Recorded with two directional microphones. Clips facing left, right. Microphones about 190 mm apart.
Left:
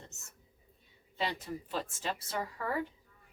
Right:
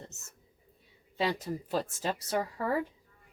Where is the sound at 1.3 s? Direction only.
40° right (ahead or behind).